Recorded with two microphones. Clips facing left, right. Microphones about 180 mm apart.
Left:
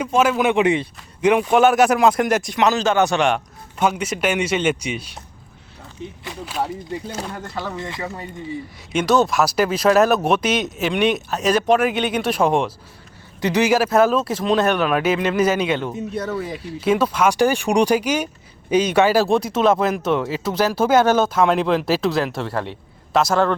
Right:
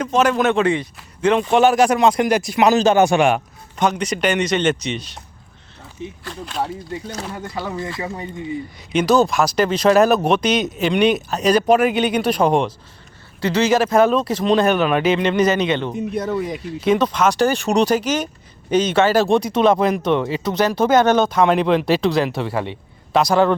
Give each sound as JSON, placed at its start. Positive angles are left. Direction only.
{"t": 0.0, "sound": "speech", "side_deg": 10}
{"t": 3.8, "sound": "speech", "side_deg": 5}
{"t": 6.2, "sound": "a sound", "side_deg": 5}
{"t": 7.3, "sound": "speech", "side_deg": -5}
{"t": 8.9, "sound": "speech", "side_deg": 0}
{"t": 13.4, "sound": "speech", "side_deg": 15}
{"t": 15.9, "sound": "speech", "side_deg": -20}
{"t": 16.8, "sound": "speech", "side_deg": 5}